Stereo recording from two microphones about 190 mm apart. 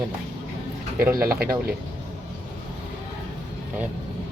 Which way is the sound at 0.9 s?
10° right (ahead or behind).